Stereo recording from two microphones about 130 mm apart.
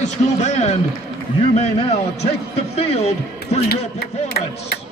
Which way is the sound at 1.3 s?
55° left (ahead or behind).